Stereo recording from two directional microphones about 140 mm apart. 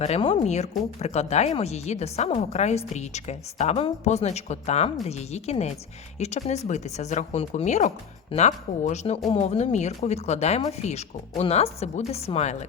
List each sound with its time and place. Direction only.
0.0 s speech: 45° left (ahead or behind)
0.4 s speech: 55° left (ahead or behind)